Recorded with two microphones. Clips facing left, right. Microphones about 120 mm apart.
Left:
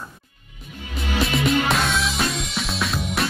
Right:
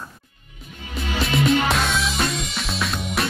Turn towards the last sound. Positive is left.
turn(degrees=0)  # may be behind; listen again after turning